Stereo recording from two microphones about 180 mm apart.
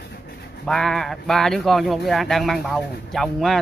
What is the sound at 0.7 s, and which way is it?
Speech, 5° left (ahead or behind).